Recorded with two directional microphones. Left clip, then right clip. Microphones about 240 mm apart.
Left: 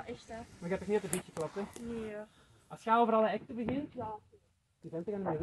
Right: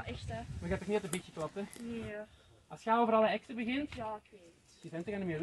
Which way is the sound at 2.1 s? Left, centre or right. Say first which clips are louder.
Even; centre.